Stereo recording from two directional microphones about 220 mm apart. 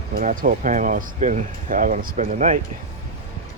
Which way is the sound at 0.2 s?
35° right (ahead or behind).